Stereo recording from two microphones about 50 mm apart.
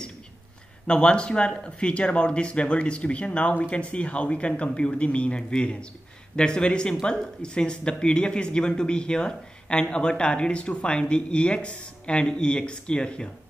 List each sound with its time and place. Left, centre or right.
0.8 s speech: centre